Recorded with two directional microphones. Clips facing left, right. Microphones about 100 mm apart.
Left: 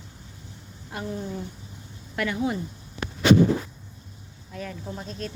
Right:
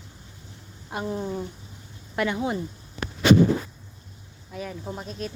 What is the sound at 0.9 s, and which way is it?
Speech, 25° right (ahead or behind).